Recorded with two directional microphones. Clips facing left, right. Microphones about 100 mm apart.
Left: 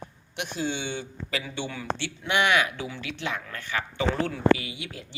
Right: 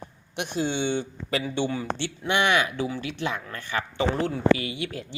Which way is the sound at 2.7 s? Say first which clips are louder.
Right 6 dB; 40° right (ahead or behind).